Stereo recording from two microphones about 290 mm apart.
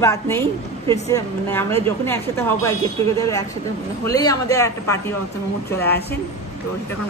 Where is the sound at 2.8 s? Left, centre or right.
Centre.